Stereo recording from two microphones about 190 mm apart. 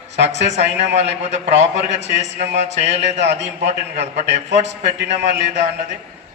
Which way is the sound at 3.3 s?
70° right (ahead or behind).